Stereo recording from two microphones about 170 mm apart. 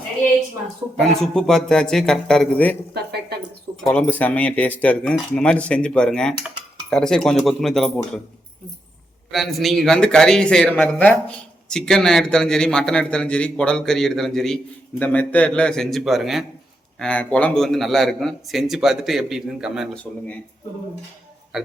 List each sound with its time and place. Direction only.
0.9 s a man's voice: centre (ahead or behind)
2.9 s speech: 75° right (ahead or behind)
3.8 s a man's voice: 5° left (ahead or behind)
9.3 s a man's voice: centre (ahead or behind)